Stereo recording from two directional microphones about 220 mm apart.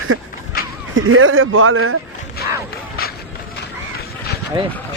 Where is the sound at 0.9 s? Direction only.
65° right (ahead or behind).